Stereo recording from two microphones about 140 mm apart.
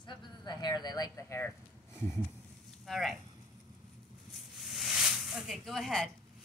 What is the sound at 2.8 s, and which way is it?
Speech, centre (ahead or behind).